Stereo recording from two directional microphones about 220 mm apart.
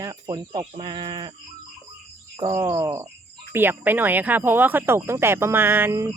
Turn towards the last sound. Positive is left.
turn(degrees=-15)  # may be behind; listen again after turning